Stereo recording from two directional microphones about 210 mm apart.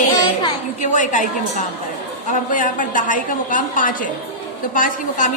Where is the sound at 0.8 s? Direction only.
35° left (ahead or behind).